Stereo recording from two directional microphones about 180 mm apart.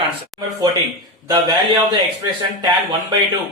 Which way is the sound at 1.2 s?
25° right (ahead or behind).